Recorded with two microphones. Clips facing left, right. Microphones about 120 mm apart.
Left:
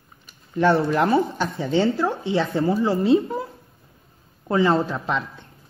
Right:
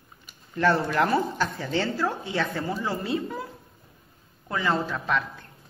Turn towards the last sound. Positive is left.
turn(degrees=25)  # may be behind; listen again after turning